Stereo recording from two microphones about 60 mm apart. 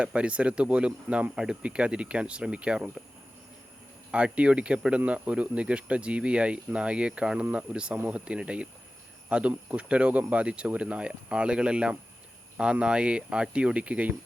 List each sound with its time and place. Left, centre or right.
0.0 s speech: centre
4.1 s speech: centre